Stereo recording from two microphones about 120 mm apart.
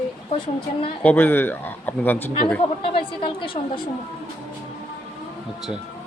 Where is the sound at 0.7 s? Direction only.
90° left.